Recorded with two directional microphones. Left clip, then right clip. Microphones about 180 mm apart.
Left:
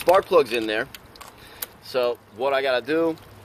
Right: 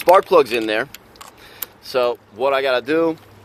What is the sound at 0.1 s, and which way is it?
Speech, 50° right (ahead or behind).